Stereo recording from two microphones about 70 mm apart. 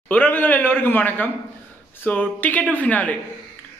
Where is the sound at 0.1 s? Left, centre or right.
Left.